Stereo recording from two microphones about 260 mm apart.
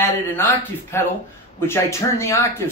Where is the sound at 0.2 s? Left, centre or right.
Centre.